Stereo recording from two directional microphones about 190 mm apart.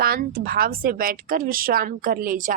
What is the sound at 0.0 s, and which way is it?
Speech, 50° right (ahead or behind).